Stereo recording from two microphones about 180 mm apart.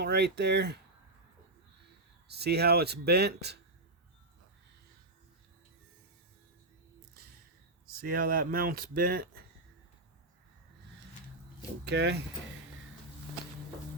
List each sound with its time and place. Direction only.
0.0 s speech: 65° right (ahead or behind)
2.2 s speech: 65° right (ahead or behind)
8.0 s speech: 55° right (ahead or behind)
11.9 s speech: 70° right (ahead or behind)